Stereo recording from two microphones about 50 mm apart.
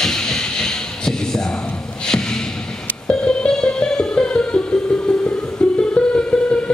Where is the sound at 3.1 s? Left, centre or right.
Centre.